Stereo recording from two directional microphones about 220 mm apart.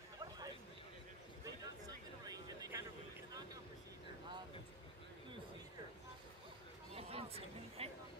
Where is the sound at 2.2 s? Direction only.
15° right (ahead or behind).